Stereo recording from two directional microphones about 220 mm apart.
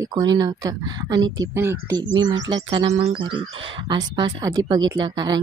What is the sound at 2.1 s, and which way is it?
Speech, 55° right (ahead or behind).